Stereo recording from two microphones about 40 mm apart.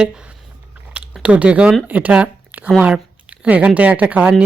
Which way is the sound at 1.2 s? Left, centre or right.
Right.